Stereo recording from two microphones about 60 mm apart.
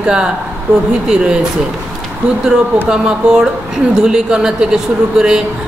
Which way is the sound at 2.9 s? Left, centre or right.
Centre.